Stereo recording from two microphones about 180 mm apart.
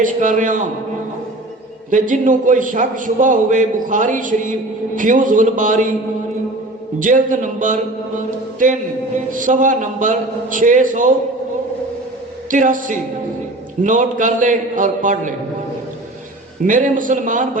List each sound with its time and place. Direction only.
0.0 s a man's voice: 45° right (ahead or behind)
1.9 s a man's voice: 45° right (ahead or behind)
7.0 s a man's voice: 45° right (ahead or behind)
12.5 s a man's voice: 45° right (ahead or behind)
16.6 s a man's voice: 45° right (ahead or behind)